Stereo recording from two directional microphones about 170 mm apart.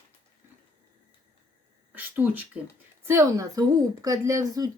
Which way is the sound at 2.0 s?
10° right (ahead or behind).